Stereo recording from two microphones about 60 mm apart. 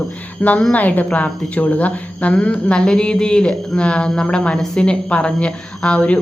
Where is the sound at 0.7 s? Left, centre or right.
Left.